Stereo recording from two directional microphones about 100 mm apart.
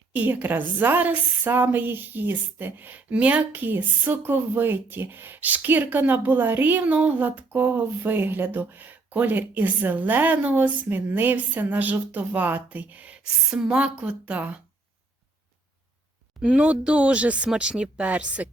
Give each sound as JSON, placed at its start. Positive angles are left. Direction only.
{"t": 0.1, "sound": "a woman's voice", "side_deg": -15}
{"t": 16.4, "sound": "speech", "side_deg": -10}